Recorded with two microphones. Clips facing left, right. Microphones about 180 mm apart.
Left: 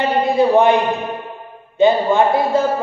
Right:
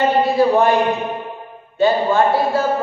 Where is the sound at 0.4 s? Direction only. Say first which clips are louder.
Left 3 dB; 20° left (ahead or behind).